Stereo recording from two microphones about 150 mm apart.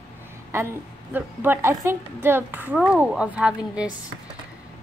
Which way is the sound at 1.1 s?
15° right (ahead or behind).